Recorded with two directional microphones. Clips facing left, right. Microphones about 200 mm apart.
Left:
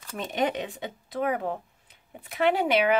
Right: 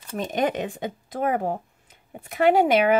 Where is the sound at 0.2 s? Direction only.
50° right (ahead or behind).